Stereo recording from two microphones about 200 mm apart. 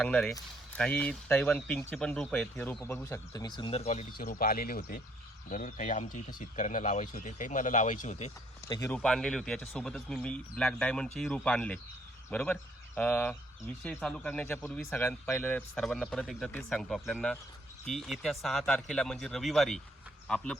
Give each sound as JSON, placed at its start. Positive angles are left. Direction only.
{"t": 0.0, "sound": "speech", "side_deg": 5}
{"t": 4.2, "sound": "speech", "side_deg": 45}
{"t": 8.6, "sound": "speech", "side_deg": 15}
{"t": 9.0, "sound": "speech", "side_deg": 5}